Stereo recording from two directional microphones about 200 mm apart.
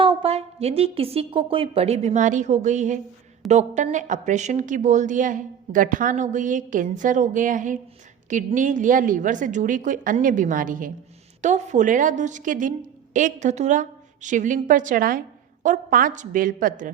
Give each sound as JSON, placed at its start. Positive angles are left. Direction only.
{"t": 0.0, "sound": "a woman's voice", "side_deg": -25}